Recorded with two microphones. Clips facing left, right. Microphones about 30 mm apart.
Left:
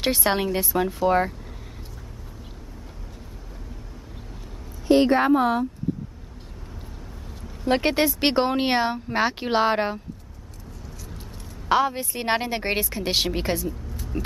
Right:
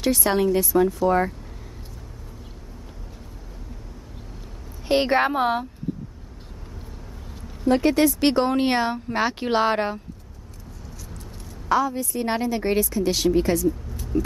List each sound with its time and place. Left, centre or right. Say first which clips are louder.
0.0 s speech: right 2 dB; left
4.8 s a woman's voice: left 2 dB; right
7.6 s speech: right 3 dB; left; by 9.9 s centre
11.7 s a woman's voice: even; left
14.1 s vehicle: right 3 dB; left